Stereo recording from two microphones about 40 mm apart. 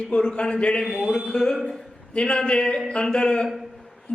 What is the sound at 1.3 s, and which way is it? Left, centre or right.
A man's voice, centre.